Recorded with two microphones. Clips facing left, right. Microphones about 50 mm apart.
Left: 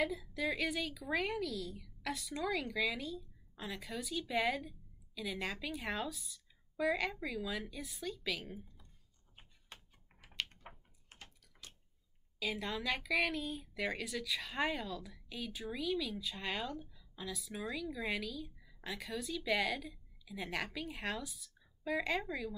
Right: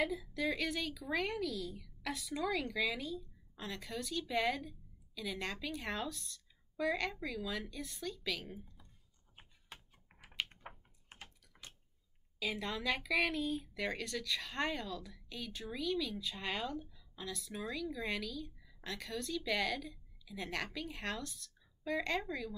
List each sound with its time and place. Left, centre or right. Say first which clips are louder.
0.0 s a woman's voice: even; centre
9.7 s computer keyboard: right 1 dB; centre
10.1 s typing: right 1 dB; centre
11.5 s a sound: right 1 dB; centre
12.4 s a woman's voice: even; centre